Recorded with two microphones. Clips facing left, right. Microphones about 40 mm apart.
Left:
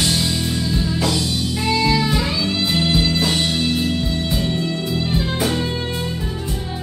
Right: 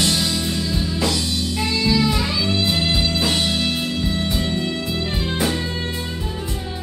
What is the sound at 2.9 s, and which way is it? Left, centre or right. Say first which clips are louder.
Music: left 2 dB; centre.